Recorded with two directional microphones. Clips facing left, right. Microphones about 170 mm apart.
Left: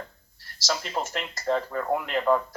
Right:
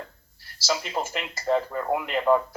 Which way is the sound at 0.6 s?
5° right (ahead or behind).